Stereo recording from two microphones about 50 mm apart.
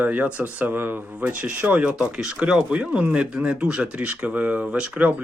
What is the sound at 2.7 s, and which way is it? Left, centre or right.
Speech, right.